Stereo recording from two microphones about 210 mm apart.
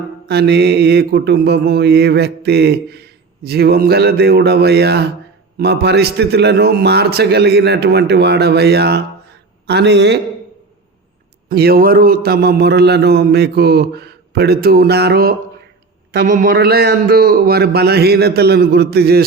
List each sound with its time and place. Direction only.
0.3 s mantra: 50° right (ahead or behind)
9.6 s speech: 55° right (ahead or behind)
11.4 s mantra: 45° right (ahead or behind)